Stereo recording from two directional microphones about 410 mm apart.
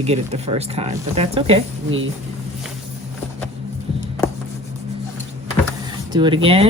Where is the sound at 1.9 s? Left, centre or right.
Right.